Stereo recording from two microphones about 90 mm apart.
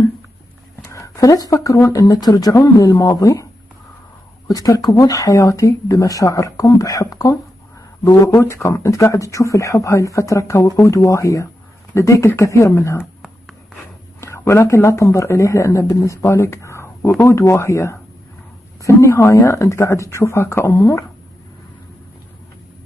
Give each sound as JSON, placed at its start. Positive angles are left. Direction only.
{"t": 0.8, "sound": "a sound", "side_deg": 35}
{"t": 1.5, "sound": "speech", "side_deg": 35}
{"t": 3.0, "sound": "speech", "side_deg": 40}
{"t": 4.5, "sound": "speech", "side_deg": 45}
{"t": 14.2, "sound": "speech", "side_deg": 30}